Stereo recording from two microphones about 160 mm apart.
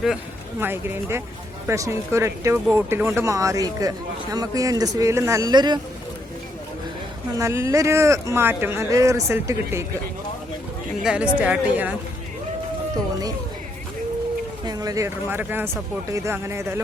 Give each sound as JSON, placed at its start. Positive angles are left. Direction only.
{"t": 0.6, "sound": "speech", "side_deg": -15}
{"t": 7.3, "sound": "speech", "side_deg": -20}
{"t": 11.0, "sound": "speech", "side_deg": -5}
{"t": 14.6, "sound": "speech", "side_deg": -25}